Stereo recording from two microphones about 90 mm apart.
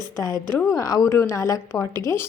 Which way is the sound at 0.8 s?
40° left (ahead or behind).